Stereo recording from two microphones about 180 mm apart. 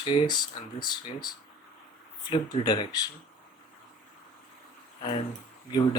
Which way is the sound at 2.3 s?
25° left (ahead or behind).